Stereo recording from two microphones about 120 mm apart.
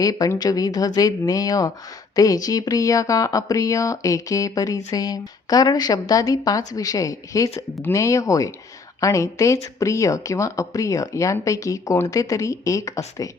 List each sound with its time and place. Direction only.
0.0 s speech: 30° left (ahead or behind)